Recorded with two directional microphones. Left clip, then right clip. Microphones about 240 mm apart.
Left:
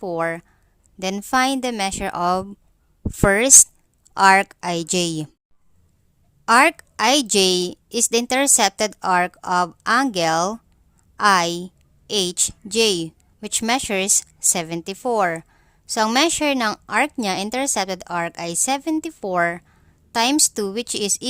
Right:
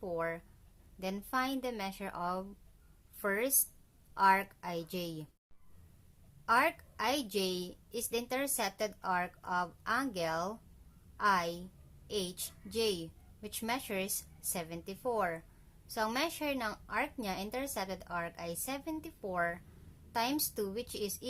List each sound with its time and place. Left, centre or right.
0.0 s a woman's voice: left
6.4 s a woman's voice: left